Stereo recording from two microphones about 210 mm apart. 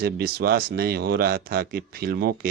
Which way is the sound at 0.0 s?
45° right (ahead or behind).